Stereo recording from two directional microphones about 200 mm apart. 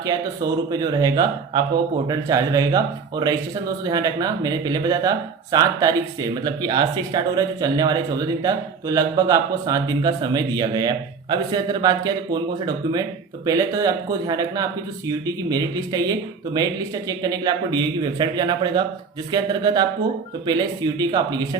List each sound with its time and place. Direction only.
0.7 s speech: 20° right (ahead or behind)